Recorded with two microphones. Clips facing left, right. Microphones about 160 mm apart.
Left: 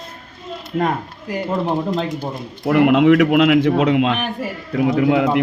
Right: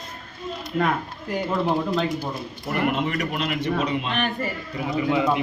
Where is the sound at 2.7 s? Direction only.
90° left.